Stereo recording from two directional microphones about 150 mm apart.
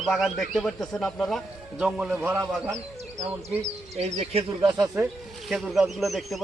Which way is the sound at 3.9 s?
45° right (ahead or behind).